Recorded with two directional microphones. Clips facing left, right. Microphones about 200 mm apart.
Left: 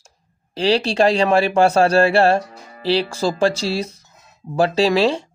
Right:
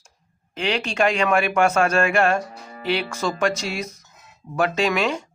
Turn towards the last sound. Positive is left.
turn(degrees=30)  # may be behind; listen again after turning